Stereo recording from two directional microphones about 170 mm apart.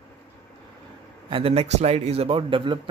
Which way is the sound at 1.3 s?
35° right (ahead or behind).